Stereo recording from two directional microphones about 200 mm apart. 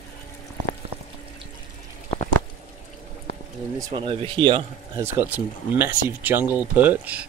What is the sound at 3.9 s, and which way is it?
Speech, 25° right (ahead or behind).